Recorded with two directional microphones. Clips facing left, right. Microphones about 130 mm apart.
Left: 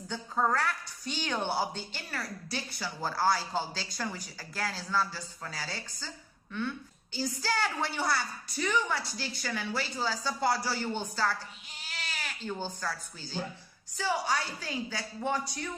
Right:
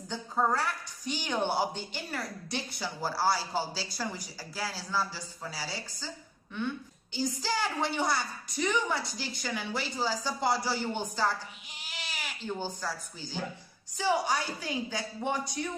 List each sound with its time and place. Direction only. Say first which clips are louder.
0.1 s a woman's voice: even; 15° right (ahead or behind)
7.1 s a woman's voice: right 1 dB; 15° right (ahead or behind)